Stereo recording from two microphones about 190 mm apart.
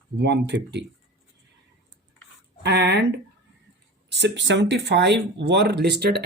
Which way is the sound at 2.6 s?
65° right (ahead or behind).